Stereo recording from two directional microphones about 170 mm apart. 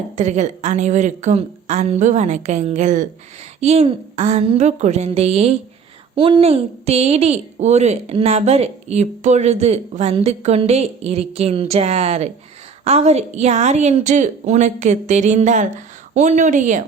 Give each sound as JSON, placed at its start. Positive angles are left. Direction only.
{"t": 0.2, "sound": "a woman's voice", "side_deg": -45}